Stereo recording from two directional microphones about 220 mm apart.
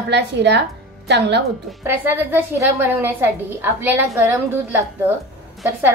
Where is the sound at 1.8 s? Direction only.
10° right (ahead or behind).